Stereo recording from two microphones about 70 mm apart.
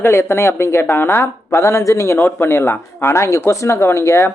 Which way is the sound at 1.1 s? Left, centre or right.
Left.